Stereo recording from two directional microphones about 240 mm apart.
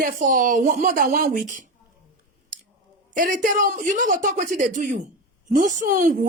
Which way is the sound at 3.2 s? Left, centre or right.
Right.